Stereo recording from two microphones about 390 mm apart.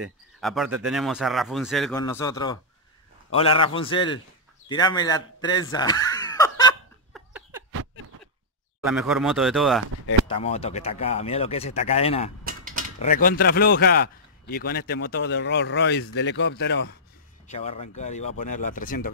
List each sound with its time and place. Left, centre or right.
0.0 s speech: centre
7.2 s a sound: centre
8.8 s speech: centre
10.2 s speech: centre
12.4 s mechanisms: right
13.0 s a man's voice: left
17.5 s a man's voice: centre